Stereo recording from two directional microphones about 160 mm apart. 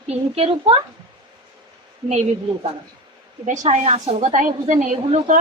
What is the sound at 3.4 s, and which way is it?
A woman's voice, 50° right (ahead or behind).